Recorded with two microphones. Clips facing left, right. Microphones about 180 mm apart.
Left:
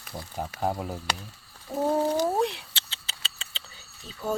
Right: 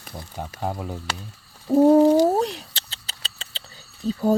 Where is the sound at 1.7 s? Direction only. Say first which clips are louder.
Right 13 dB; 35° right (ahead or behind).